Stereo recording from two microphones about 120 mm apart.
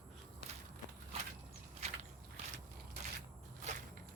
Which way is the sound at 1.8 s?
65° right (ahead or behind).